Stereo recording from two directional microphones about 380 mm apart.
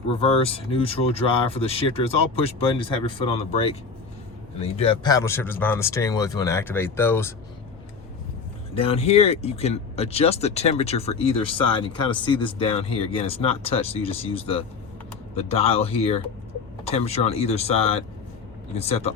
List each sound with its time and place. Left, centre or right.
0.1 s speech: centre
8.7 s speech: centre